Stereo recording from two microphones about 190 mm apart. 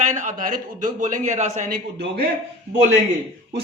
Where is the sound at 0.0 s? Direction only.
40° right (ahead or behind).